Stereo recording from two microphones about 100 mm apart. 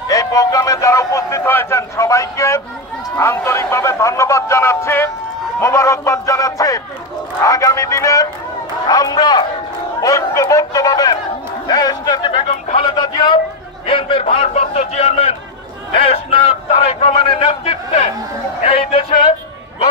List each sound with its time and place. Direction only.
0.1 s a man's voice: 35° left (ahead or behind)
10.0 s a man's voice: 30° left (ahead or behind); by 12.4 s 50° left (ahead or behind)
12.7 s a sound: 55° left (ahead or behind)
13.8 s a man's voice: 60° left (ahead or behind); by 15.3 s 90° left
16.0 s a sound: 90° left; by 18.1 s 75° left (ahead or behind)
18.7 s music: 70° left (ahead or behind)